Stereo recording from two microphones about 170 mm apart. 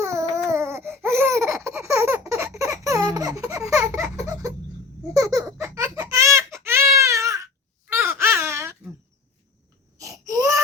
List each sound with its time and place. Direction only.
0.0 s baby cry: 15° right (ahead or behind)
0.3 s laughter: 15° right (ahead or behind)
3.6 s a sound: 5° right (ahead or behind)
5.1 s baby laughter: 20° right (ahead or behind)
6.0 s baby cry: 15° right (ahead or behind)
10.0 s baby cry: 20° right (ahead or behind)